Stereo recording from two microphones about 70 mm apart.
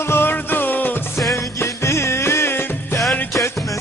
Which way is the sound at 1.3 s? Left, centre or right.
Left.